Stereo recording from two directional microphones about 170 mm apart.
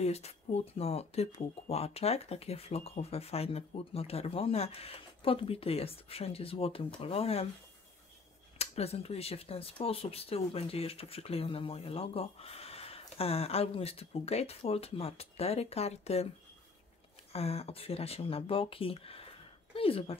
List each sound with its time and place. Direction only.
0.0 s speech: 40° left (ahead or behind)
8.5 s speech: 40° left (ahead or behind)
17.3 s speech: 35° left (ahead or behind)